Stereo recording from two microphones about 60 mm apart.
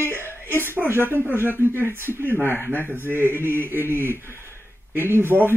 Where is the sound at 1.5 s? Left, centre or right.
Left.